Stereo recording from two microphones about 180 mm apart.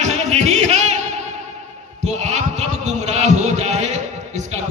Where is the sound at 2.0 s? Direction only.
40° right (ahead or behind).